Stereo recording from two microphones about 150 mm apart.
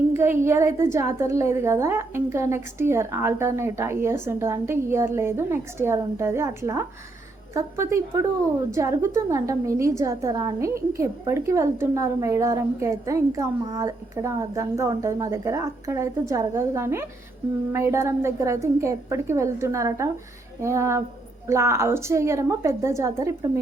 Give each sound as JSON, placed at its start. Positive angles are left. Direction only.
{"t": 0.1, "sound": "a woman's voice", "side_deg": -15}